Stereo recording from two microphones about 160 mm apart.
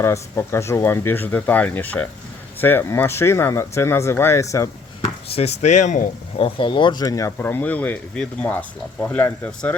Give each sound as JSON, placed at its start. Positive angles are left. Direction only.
{"t": 0.0, "sound": "speech", "side_deg": 15}
{"t": 5.3, "sound": "speech", "side_deg": 40}
{"t": 6.4, "sound": "speech", "side_deg": 30}